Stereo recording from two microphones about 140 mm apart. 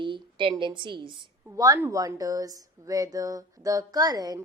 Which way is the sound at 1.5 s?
25° right (ahead or behind).